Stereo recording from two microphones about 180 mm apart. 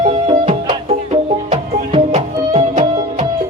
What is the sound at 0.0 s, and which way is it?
Music, 30° right (ahead or behind).